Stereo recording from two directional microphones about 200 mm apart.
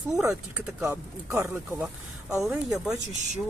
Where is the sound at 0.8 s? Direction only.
15° right (ahead or behind).